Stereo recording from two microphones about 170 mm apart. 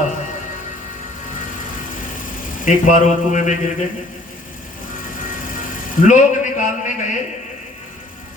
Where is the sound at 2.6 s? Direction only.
45° left (ahead or behind).